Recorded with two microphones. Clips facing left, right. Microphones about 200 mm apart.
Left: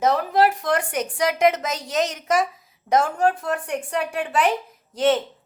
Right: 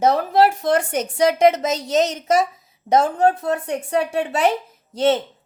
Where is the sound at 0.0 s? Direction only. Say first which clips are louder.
Right 3 dB; 30° right (ahead or behind).